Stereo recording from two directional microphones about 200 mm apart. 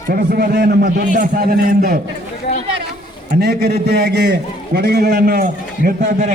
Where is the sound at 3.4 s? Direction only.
55° right (ahead or behind).